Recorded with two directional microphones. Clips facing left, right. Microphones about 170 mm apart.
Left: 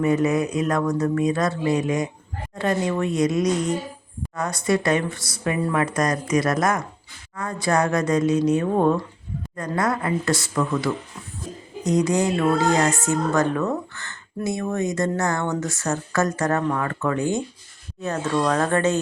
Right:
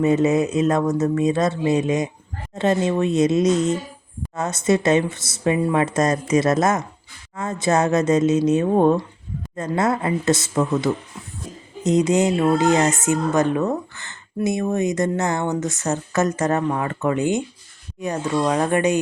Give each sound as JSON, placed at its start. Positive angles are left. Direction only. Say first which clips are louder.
{"t": 0.0, "sound": "speech", "louder": "right 3 dB", "side_deg": -25}